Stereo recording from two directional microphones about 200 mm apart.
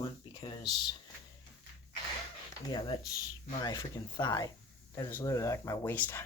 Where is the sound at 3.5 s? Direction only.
20° left (ahead or behind).